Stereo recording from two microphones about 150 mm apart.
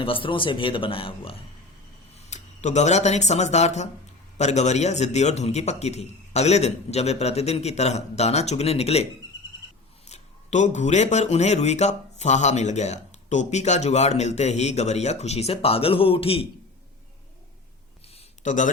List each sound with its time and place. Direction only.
0.0 s a man's voice: 35° left (ahead or behind)
2.1 s speech: 50° left (ahead or behind)
10.1 s speech: 50° left (ahead or behind)
18.1 s a sound: 50° left (ahead or behind)